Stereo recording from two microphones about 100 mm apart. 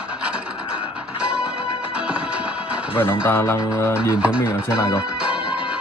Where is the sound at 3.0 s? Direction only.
25° left (ahead or behind).